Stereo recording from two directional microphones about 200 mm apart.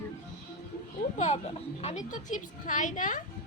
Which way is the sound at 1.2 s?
35° left (ahead or behind).